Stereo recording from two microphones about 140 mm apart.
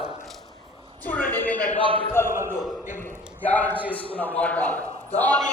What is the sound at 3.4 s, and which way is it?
A man's voice, 10° left (ahead or behind).